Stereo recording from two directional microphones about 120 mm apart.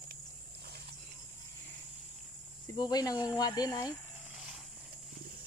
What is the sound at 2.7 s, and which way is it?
Speech, 35° left (ahead or behind).